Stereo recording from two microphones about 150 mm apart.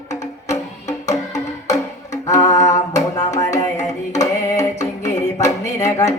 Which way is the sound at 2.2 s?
25° left (ahead or behind).